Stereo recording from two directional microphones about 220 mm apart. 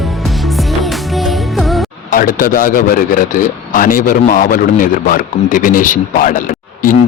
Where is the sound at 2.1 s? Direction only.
40° left (ahead or behind).